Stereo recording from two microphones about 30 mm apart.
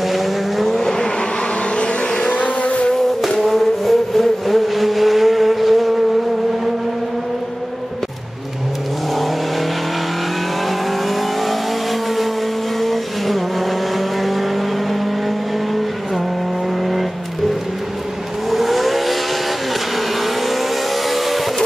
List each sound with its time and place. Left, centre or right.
0.1 s vehicle: centre
2.2 s vehicle: left
3.3 s vehicle: centre
12.8 s vehicle: centre
18.5 s vehicle: centre
21.1 s vehicle: centre